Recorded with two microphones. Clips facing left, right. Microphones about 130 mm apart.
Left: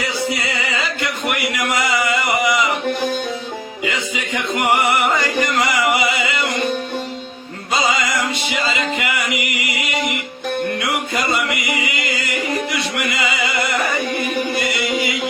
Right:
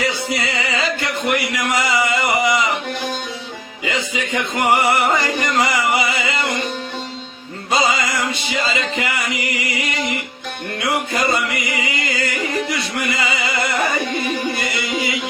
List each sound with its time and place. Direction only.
1.0 s a sound: 30° right (ahead or behind)
3.8 s music: 25° right (ahead or behind)
7.7 s music: 25° right (ahead or behind)